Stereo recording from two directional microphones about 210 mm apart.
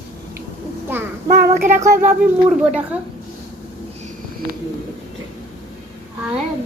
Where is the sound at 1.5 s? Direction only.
40° right (ahead or behind).